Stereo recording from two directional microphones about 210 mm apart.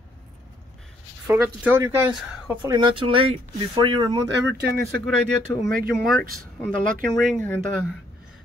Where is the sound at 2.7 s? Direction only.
25° right (ahead or behind).